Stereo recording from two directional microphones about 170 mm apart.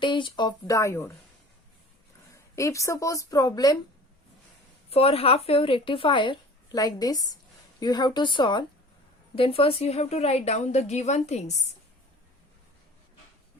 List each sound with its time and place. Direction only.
0.0 s speech: 30° left (ahead or behind)
2.3 s speech: 20° left (ahead or behind)
4.9 s speech: 35° left (ahead or behind)